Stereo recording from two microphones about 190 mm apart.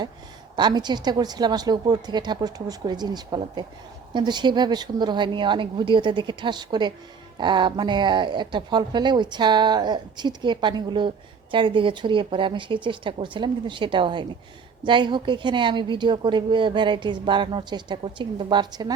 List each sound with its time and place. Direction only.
0.5 s a woman's voice: 20° right (ahead or behind)